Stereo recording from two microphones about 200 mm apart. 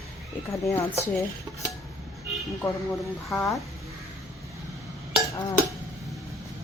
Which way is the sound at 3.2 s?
10° left (ahead or behind).